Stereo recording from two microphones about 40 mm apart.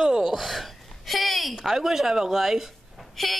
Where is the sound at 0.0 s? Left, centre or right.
Centre.